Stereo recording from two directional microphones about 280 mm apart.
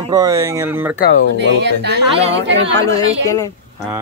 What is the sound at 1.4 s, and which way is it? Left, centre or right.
Speech, right.